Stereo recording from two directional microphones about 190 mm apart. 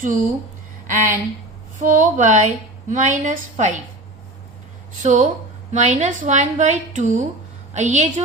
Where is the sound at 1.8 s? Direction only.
40° right (ahead or behind).